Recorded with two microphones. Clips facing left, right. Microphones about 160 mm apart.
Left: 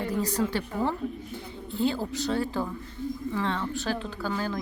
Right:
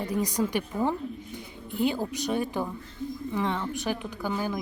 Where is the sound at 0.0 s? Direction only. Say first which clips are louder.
Even; 15° right (ahead or behind).